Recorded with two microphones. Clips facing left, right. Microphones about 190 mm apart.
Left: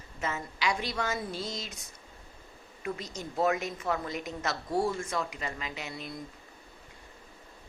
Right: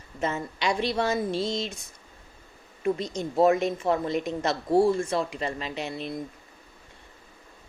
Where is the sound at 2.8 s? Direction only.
30° right (ahead or behind).